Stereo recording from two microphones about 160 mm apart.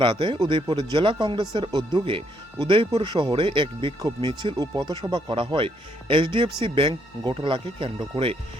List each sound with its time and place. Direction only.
0.0 s speech: 30° right (ahead or behind)